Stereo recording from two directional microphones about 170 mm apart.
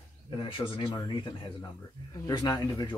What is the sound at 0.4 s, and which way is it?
Speech, 30° left (ahead or behind).